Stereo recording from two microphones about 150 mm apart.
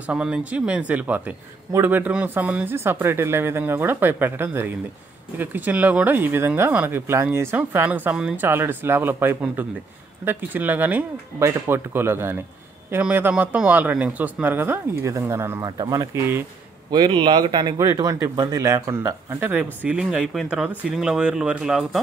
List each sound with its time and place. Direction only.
0.0 s speech: 5° right (ahead or behind)
16.9 s speech: 30° right (ahead or behind); by 22.0 s centre (ahead or behind)